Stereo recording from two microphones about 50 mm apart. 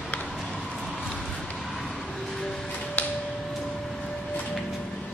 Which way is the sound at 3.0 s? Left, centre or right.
Left.